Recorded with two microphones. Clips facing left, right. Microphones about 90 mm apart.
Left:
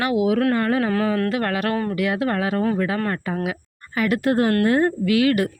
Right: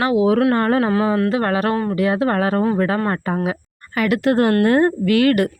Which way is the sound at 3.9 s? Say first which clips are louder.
Right 3 dB; 75° right (ahead or behind).